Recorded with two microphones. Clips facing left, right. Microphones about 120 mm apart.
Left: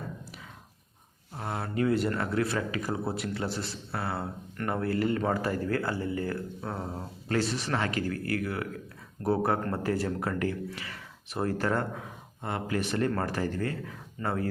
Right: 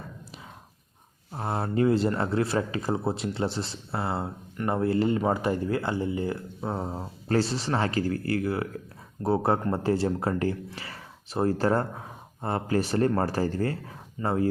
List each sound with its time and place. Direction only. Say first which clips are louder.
1.3 s speech: right 5 dB; 30° right (ahead or behind)